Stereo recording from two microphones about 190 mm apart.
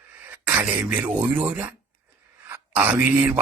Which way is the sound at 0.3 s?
10° right (ahead or behind).